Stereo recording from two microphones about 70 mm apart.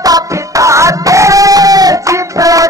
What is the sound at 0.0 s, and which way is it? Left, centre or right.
Music, right.